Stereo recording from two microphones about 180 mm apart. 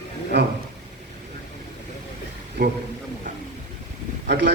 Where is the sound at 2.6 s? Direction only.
65° right (ahead or behind).